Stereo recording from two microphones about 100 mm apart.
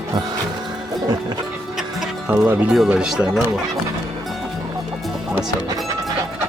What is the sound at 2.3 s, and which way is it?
Speech, 20° right (ahead or behind).